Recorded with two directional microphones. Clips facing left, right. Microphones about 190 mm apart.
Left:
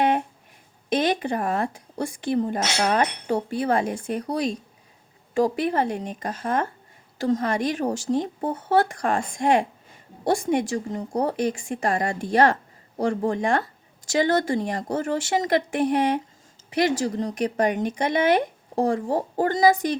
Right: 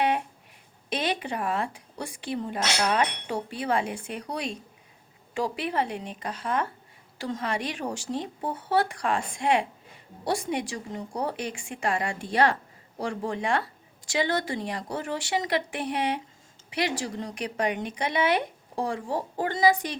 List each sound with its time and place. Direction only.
0.9 s speech: 45° left (ahead or behind)